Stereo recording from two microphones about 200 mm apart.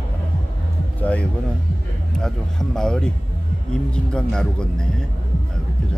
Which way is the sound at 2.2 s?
Centre (ahead or behind).